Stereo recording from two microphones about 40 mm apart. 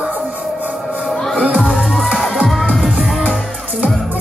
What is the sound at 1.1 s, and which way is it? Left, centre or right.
Music, centre.